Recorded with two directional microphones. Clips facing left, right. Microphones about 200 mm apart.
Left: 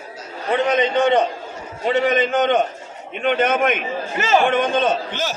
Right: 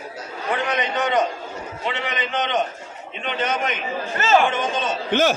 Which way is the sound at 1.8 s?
45° left (ahead or behind).